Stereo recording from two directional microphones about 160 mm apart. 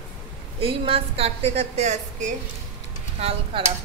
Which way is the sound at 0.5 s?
35° right (ahead or behind).